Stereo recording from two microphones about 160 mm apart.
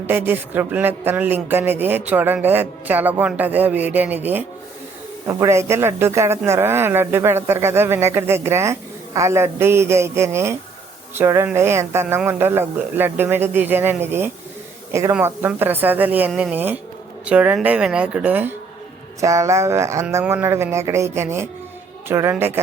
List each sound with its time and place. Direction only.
0.1 s speech: 15° right (ahead or behind)